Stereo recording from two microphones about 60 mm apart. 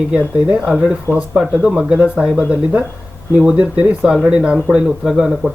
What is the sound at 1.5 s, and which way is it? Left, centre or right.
Speech, centre.